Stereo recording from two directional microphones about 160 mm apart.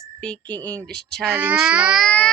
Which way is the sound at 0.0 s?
5° left (ahead or behind).